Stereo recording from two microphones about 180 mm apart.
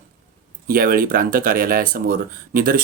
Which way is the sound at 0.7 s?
55° right (ahead or behind).